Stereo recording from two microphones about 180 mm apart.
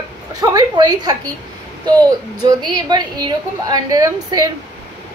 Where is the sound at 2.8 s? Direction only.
25° right (ahead or behind).